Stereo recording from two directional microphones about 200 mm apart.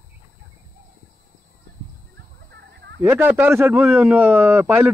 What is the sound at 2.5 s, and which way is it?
Chicken, 55° right (ahead or behind).